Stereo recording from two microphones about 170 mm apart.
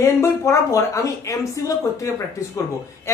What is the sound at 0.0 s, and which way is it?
Speech, 15° left (ahead or behind).